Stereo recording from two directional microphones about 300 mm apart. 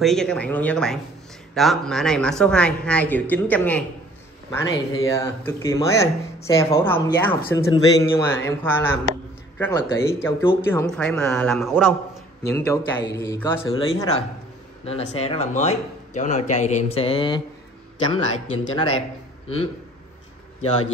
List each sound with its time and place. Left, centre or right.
0.0 s a man's voice: centre
12.5 s speech: centre